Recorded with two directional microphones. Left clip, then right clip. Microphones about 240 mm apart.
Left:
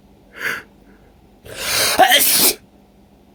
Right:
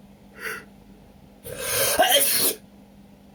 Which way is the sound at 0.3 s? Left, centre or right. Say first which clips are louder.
Left 9 dB; left.